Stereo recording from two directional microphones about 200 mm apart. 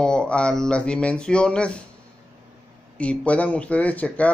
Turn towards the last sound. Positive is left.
turn(degrees=5)  # may be behind; listen again after turning